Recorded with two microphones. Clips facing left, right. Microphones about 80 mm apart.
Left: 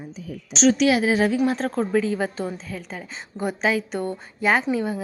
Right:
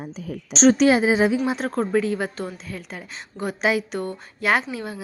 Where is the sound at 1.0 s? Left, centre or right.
Centre.